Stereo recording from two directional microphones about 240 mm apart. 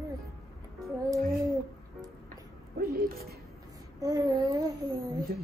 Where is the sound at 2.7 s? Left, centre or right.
Right.